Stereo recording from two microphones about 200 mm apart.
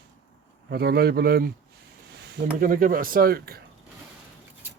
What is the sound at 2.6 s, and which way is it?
Speech, 45° right (ahead or behind).